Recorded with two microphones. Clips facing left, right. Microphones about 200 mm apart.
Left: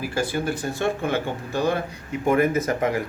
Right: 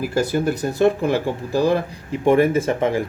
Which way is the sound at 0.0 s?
40° right (ahead or behind).